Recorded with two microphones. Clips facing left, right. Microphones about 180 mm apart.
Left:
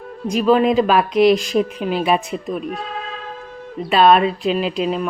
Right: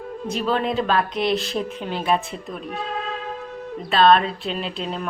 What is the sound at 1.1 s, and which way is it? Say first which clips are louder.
Speech: left 9 dB; 25° right (ahead or behind).